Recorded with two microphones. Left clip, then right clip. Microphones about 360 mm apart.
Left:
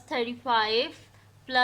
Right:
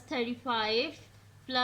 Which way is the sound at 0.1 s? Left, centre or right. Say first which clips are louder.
Left 6 dB; centre.